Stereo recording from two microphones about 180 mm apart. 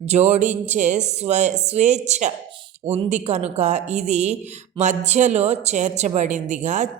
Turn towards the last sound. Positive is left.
turn(degrees=-40)  # may be behind; listen again after turning